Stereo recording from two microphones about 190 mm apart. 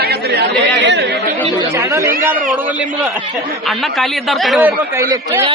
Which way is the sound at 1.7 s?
15° right (ahead or behind).